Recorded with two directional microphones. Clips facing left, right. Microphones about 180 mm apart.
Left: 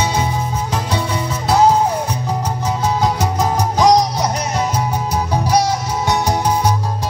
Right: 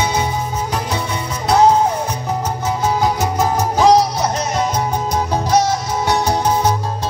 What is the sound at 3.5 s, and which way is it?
Music, 15° left (ahead or behind).